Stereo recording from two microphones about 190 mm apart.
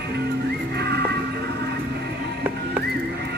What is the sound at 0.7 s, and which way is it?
Music, 60° right (ahead or behind).